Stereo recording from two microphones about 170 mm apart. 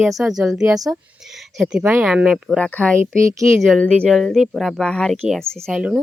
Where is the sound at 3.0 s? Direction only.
20° right (ahead or behind).